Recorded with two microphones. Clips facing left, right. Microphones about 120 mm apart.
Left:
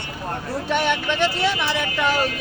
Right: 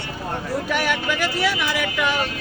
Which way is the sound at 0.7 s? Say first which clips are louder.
Left 3 dB; 25° left (ahead or behind).